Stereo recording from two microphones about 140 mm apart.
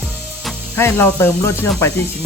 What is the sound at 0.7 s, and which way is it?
Speech, 15° left (ahead or behind).